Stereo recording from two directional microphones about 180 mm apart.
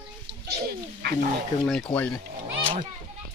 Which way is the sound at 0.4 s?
65° right (ahead or behind).